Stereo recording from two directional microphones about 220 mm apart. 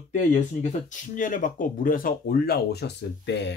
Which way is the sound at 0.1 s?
35° left (ahead or behind).